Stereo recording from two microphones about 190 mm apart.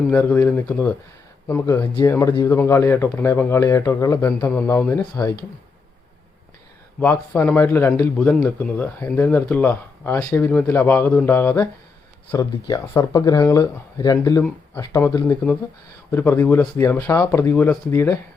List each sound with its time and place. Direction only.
0.1 s speech: 10° left (ahead or behind)
7.0 s speech: 10° left (ahead or behind)
10.2 s speech: 20° left (ahead or behind)
10.4 s speech: 10° left (ahead or behind)